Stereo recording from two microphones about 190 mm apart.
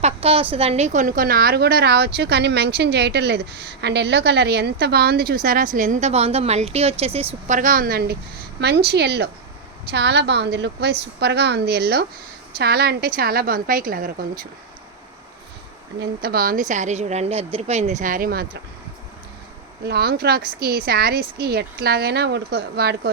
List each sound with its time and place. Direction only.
0.0 s a woman's voice: 30° right (ahead or behind)
7.4 s a woman's voice: 40° right (ahead or behind)
16.2 s a woman's voice: 50° right (ahead or behind)
19.8 s speech: 55° right (ahead or behind)